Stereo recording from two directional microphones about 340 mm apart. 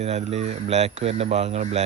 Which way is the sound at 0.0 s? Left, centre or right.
Centre.